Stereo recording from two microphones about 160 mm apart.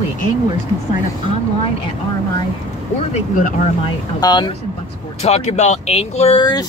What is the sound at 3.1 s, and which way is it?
Speech, 55° left (ahead or behind).